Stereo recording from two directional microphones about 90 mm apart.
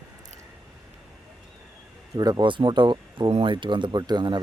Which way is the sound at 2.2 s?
45° right (ahead or behind).